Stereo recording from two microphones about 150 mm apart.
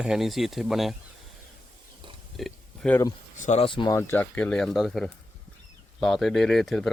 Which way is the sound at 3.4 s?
50° left (ahead or behind).